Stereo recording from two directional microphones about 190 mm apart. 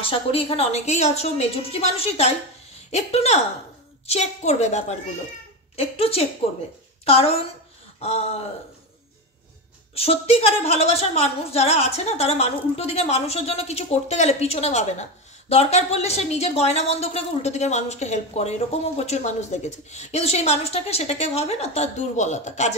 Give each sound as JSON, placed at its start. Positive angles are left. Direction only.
{"t": 0.0, "sound": "a woman's voice", "side_deg": 30}
{"t": 9.9, "sound": "a woman's voice", "side_deg": 30}